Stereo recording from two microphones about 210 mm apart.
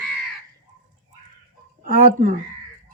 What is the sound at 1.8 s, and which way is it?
Speech, 40° right (ahead or behind).